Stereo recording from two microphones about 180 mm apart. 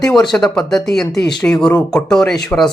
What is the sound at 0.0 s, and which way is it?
A man's voice, centre (ahead or behind).